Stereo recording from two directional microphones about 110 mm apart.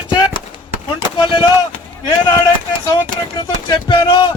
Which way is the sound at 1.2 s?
50° left (ahead or behind).